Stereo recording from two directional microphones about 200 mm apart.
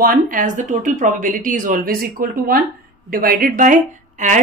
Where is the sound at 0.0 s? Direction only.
45° right (ahead or behind).